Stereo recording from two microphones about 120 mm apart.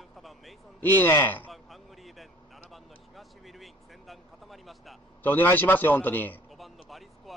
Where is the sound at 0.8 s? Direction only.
15° left (ahead or behind).